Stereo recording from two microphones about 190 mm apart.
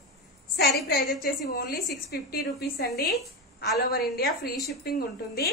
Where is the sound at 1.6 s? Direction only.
55° left (ahead or behind).